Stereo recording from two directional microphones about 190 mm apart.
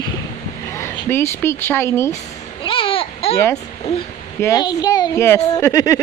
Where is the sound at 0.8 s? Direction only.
15° left (ahead or behind).